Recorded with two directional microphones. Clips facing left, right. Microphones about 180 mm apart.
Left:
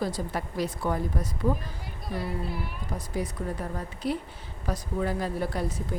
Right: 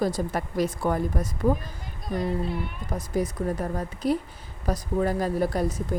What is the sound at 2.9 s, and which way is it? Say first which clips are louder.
A woman's voice: right 6 dB; 45° right (ahead or behind).